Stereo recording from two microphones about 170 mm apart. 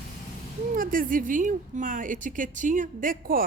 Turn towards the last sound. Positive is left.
turn(degrees=-55)  # may be behind; listen again after turning